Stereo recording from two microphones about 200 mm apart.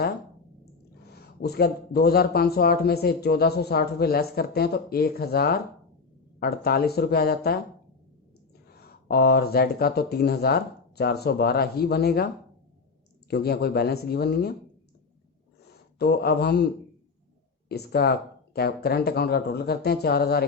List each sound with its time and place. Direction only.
1.1 s a man's voice: 55° left (ahead or behind)
8.7 s a man's voice: 50° left (ahead or behind)
13.3 s a man's voice: 55° left (ahead or behind)
16.0 s a man's voice: 50° left (ahead or behind)
17.7 s a man's voice: 50° left (ahead or behind)